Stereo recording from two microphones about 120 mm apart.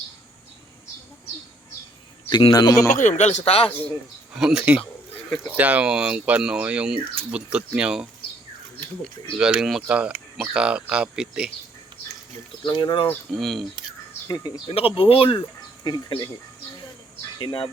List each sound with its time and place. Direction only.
2.3 s speech: 35° left (ahead or behind)
2.9 s speech: 90° left; by 3.7 s 55° left (ahead or behind)
4.4 s speech: 5° right (ahead or behind)
9.4 s speech: 5° right (ahead or behind)
12.6 s speech: 40° left (ahead or behind)
13.3 s speech: centre (ahead or behind)
14.3 s speech: 30° left (ahead or behind)
14.7 s speech: 50° left (ahead or behind)
15.8 s speech: 35° left (ahead or behind)
17.3 s speech: 40° left (ahead or behind)